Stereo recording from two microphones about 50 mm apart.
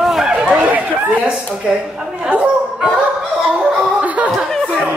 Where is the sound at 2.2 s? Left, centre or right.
Right.